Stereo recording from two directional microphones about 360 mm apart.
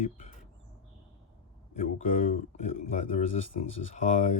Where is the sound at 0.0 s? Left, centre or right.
Centre.